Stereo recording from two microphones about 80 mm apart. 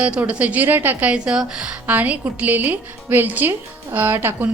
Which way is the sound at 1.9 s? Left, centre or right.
Right.